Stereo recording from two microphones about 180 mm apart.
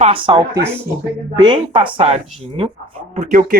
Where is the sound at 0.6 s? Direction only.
15° right (ahead or behind).